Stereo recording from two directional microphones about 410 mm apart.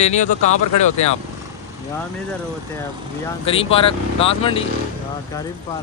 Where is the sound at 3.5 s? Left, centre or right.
Centre.